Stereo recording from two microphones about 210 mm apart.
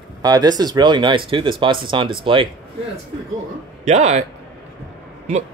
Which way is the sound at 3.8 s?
35° right (ahead or behind).